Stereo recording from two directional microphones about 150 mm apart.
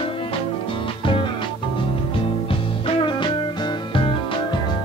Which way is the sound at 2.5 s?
35° left (ahead or behind).